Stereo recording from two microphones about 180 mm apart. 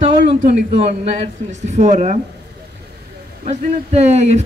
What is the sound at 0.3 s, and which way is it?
Speech, 30° right (ahead or behind).